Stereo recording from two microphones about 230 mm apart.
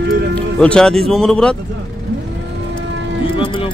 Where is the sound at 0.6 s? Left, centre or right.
Centre.